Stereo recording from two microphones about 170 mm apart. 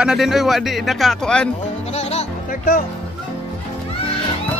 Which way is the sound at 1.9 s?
40° left (ahead or behind).